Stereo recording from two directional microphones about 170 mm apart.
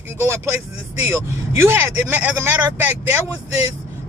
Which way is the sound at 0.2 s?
15° right (ahead or behind).